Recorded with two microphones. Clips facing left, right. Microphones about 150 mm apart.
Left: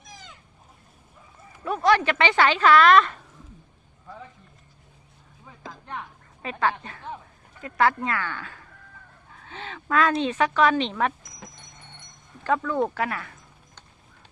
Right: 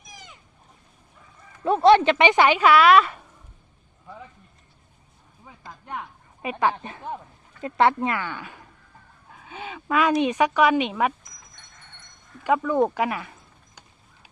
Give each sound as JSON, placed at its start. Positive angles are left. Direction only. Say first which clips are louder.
{"t": 0.0, "sound": "boat", "louder": "even", "side_deg": -15}
{"t": 1.6, "sound": "speech", "louder": "right 6 dB", "side_deg": -25}
{"t": 5.8, "sound": "speech", "louder": "right 4 dB", "side_deg": -15}
{"t": 11.4, "sound": "dog", "louder": "left 15 dB", "side_deg": 90}
{"t": 12.4, "sound": "speech", "louder": "right 3 dB", "side_deg": -15}